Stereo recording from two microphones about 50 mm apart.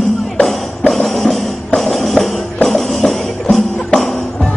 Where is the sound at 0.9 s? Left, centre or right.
Centre.